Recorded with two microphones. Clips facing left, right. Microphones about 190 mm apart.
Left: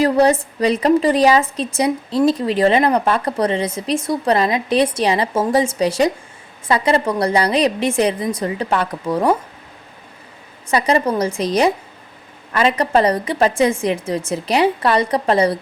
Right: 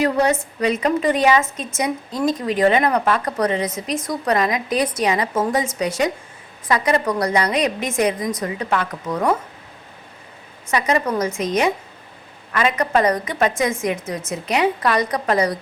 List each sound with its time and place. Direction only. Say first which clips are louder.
0.0 s a woman's voice: left 4 dB; 35° left (ahead or behind)
10.7 s a woman's voice: left 3 dB; 30° left (ahead or behind)